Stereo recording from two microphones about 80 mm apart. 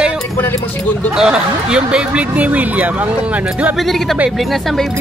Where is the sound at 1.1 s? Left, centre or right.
Centre.